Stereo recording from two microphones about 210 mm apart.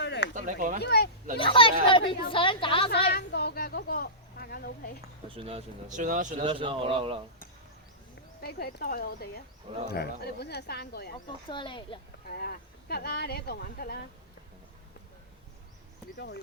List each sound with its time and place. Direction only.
0.0 s a sound: 55° left (ahead or behind)
0.3 s speech: 40° right (ahead or behind)
0.8 s speech: 50° left (ahead or behind)
1.4 s a woman's voice: 25° left (ahead or behind)
3.1 s a sound: 50° left (ahead or behind)
5.3 s speech: 25° right (ahead or behind)
6.4 s speech: 25° right (ahead or behind)
8.4 s speech: 45° left (ahead or behind)
11.4 s a woman's voice: 25° left (ahead or behind)
12.3 s speech: 50° left (ahead or behind)
16.1 s speech: 55° left (ahead or behind)